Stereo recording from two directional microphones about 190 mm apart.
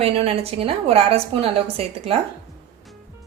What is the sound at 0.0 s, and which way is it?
A woman's voice, 30° right (ahead or behind).